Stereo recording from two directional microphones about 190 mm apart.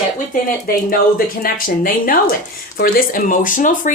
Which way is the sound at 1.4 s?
50° left (ahead or behind).